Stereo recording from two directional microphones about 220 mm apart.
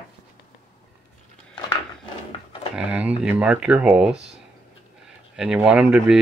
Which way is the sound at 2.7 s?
5° right (ahead or behind).